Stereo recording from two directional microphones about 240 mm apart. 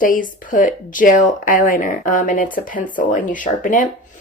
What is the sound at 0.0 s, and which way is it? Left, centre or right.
A woman's voice, left.